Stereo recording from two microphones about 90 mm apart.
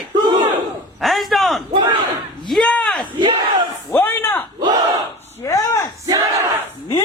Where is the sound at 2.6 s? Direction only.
15° left (ahead or behind).